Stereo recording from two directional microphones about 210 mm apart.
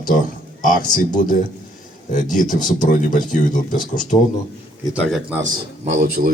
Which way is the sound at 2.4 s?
40° left (ahead or behind).